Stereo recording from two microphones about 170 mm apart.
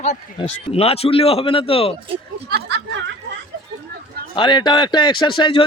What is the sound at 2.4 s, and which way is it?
Speech, 70° right (ahead or behind).